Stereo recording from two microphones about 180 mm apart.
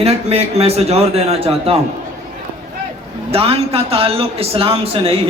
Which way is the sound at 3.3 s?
30° right (ahead or behind).